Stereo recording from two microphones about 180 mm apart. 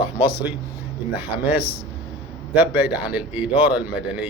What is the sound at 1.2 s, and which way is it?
Speech, 10° right (ahead or behind).